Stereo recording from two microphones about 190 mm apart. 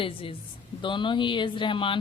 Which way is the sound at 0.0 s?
30° left (ahead or behind).